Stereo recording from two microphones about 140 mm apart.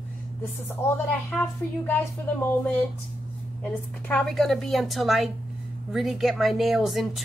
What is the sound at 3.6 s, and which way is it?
A woman's voice, 10° left (ahead or behind).